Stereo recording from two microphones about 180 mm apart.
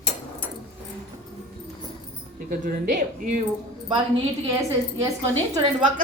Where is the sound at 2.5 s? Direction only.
55° right (ahead or behind).